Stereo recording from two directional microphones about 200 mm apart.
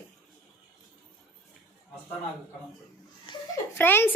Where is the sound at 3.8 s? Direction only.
10° left (ahead or behind).